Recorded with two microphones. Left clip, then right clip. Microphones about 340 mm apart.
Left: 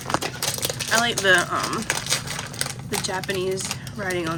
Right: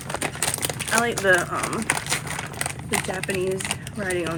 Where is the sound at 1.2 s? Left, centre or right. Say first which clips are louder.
Left 1 dB; centre.